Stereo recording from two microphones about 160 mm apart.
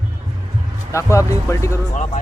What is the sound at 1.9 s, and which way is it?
Speech, 45° left (ahead or behind).